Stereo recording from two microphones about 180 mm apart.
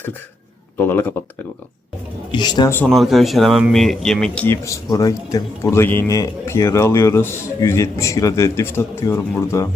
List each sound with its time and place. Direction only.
0.8 s a man's voice: 10° left (ahead or behind)
2.3 s a man's voice: 25° left (ahead or behind)
2.7 s speech: 5° left (ahead or behind)
4.4 s a man's voice: 15° left (ahead or behind)